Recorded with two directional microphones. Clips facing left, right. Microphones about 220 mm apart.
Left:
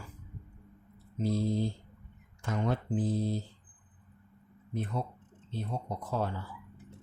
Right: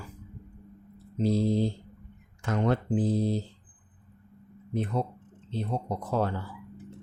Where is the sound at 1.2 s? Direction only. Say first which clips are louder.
Right 5 dB; 75° right (ahead or behind).